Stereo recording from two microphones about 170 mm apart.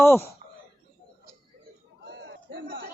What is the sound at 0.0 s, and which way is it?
Speech, 15° left (ahead or behind).